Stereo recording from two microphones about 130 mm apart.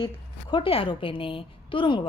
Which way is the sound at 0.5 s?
45° left (ahead or behind).